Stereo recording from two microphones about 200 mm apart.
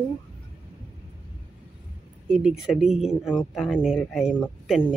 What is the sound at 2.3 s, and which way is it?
Speech, 5° right (ahead or behind).